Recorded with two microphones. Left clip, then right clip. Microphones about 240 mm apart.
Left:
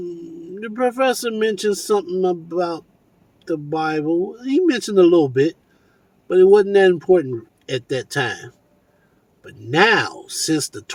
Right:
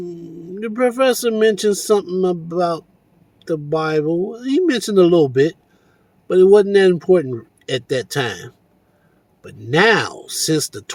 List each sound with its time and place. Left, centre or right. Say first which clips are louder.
0.5 s a man's voice: right 3 dB; right